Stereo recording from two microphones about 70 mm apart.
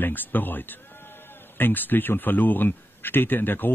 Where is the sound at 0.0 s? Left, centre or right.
Left.